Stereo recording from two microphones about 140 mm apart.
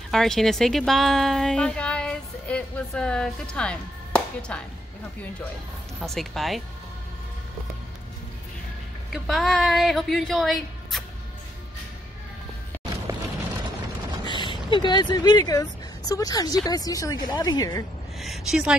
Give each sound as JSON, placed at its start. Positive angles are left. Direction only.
{"t": 0.1, "sound": "a woman's voice", "side_deg": 0}
{"t": 5.9, "sound": "speech", "side_deg": 0}
{"t": 9.1, "sound": "speech", "side_deg": 0}
{"t": 13.1, "sound": "a sound", "side_deg": -20}
{"t": 14.2, "sound": "a woman's voice", "side_deg": 35}
{"t": 18.2, "sound": "a woman's voice", "side_deg": 0}